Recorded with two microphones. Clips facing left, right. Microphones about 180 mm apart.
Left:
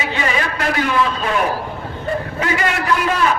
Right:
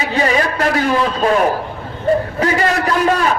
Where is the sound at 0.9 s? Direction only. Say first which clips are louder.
Right 4 dB; 40° right (ahead or behind).